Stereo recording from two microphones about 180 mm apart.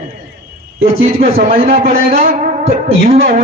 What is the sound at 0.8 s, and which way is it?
A man's voice, 55° right (ahead or behind).